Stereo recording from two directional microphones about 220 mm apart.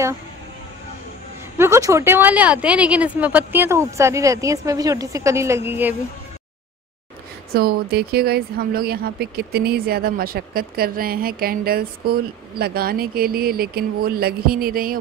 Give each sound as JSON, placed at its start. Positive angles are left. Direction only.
{"t": 1.6, "sound": "speech", "side_deg": -15}
{"t": 7.5, "sound": "speech", "side_deg": -45}